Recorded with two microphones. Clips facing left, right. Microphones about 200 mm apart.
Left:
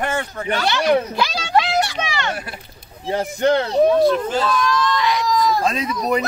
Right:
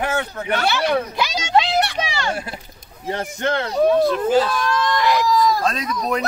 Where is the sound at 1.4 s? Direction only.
25° right (ahead or behind).